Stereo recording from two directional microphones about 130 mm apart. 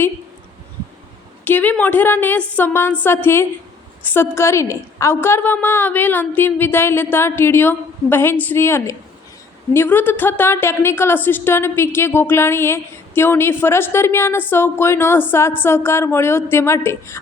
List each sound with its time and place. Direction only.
1.5 s a woman's voice: 10° left (ahead or behind)